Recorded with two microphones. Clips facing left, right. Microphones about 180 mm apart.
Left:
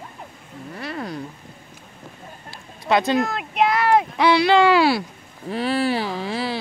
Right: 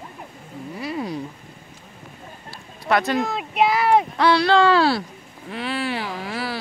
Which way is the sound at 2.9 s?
20° left (ahead or behind).